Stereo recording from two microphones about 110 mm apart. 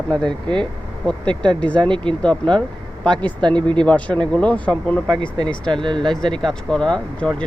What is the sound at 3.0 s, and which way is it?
Speech, 10° left (ahead or behind).